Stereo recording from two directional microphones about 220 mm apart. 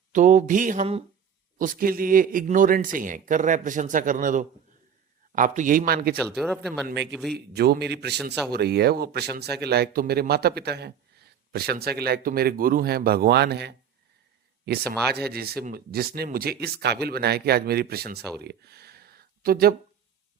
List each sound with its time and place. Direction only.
0.1 s speech: 35° right (ahead or behind)
6.2 s speech: centre (ahead or behind)
7.3 s speech: 45° right (ahead or behind)
18.3 s a sound: 50° right (ahead or behind)